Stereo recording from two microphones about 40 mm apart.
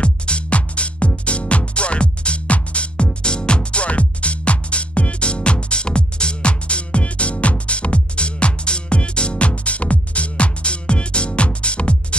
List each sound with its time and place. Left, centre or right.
0.0 s music: left